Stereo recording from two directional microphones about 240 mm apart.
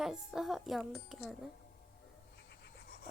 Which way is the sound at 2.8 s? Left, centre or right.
Left.